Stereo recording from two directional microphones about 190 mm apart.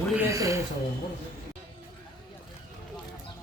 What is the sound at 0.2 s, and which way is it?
Speech, 15° right (ahead or behind).